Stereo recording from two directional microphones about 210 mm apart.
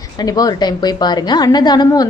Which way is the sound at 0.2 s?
20° left (ahead or behind).